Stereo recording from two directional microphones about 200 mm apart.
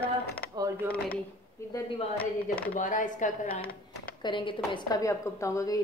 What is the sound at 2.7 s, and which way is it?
Speech, 40° left (ahead or behind).